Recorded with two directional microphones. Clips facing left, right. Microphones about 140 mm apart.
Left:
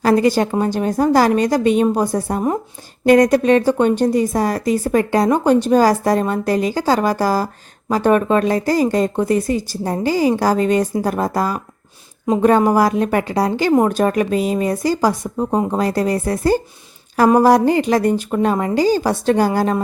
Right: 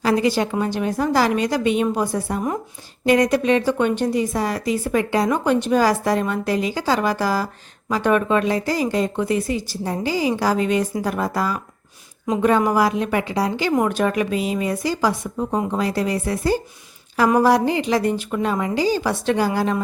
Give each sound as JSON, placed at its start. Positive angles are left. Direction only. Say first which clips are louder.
{"t": 0.0, "sound": "a woman's voice", "louder": "left 4 dB", "side_deg": 45}